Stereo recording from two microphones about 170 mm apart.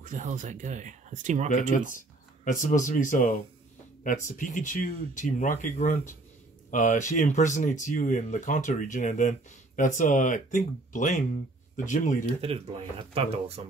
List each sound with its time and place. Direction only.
0.0 s speech: 50° right (ahead or behind)
1.5 s speech: 50° left (ahead or behind)
13.1 s speech: 35° right (ahead or behind)